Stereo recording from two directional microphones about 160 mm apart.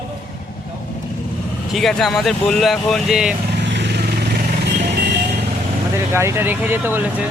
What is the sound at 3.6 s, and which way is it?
Vehicle, 90° right.